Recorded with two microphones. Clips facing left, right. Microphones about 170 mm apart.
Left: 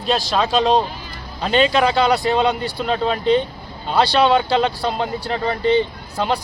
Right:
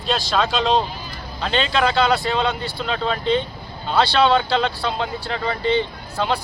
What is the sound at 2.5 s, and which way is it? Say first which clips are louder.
Speech: left 4 dB; 40° left (ahead or behind).